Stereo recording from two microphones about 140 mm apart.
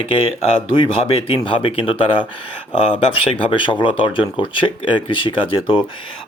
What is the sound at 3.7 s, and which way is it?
Speech, 35° left (ahead or behind).